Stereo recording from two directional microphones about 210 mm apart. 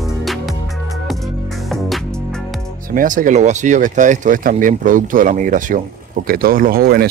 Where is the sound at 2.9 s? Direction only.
40° right (ahead or behind).